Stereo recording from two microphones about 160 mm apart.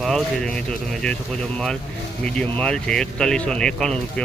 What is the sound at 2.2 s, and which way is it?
Speech, 5° left (ahead or behind).